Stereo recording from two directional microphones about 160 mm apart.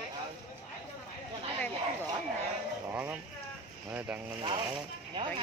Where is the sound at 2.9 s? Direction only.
10° right (ahead or behind).